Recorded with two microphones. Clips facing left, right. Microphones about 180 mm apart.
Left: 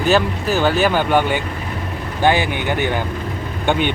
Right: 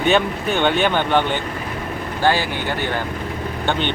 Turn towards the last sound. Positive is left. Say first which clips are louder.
# left 3 dB
turn(degrees=15)  # may be behind; listen again after turning